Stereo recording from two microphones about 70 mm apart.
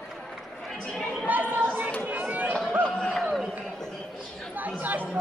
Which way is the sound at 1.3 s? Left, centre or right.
Right.